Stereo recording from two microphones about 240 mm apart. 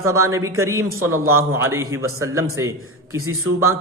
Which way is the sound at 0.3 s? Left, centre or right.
Centre.